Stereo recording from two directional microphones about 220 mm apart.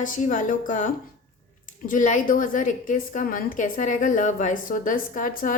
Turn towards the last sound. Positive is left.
turn(degrees=35)  # may be behind; listen again after turning